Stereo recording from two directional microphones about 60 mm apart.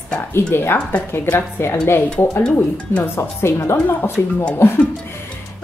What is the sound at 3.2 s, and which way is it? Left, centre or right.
Speech, left.